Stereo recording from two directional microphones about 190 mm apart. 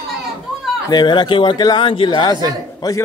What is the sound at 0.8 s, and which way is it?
Speech, 25° left (ahead or behind).